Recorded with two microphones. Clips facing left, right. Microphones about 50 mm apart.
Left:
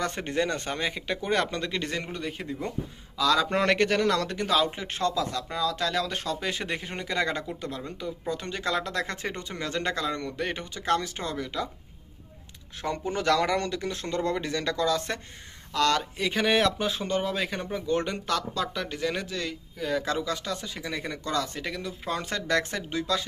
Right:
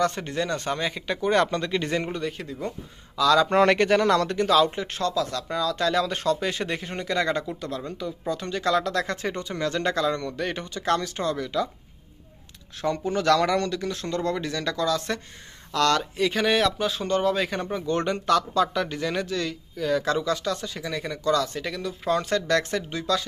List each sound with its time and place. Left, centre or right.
0.0 s speech: centre
2.1 s speech: centre
4.9 s speech: left
5.5 s speech: centre
12.8 s speech: centre
21.5 s speech: centre